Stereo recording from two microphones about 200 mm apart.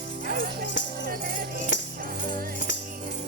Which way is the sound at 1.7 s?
65° left (ahead or behind).